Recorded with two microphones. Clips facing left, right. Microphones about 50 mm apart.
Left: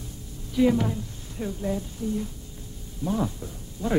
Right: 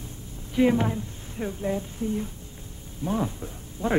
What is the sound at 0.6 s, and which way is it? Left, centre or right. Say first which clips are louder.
A man's voice: even; right.